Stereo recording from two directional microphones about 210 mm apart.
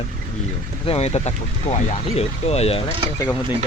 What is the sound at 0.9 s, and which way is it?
Speech, 30° left (ahead or behind).